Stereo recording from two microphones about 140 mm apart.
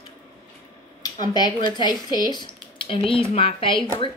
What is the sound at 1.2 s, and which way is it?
Speech, 30° left (ahead or behind).